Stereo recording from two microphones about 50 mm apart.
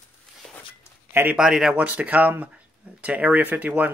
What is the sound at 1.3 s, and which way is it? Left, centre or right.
Speech, centre.